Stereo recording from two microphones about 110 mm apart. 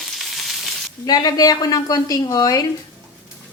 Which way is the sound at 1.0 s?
35° left (ahead or behind).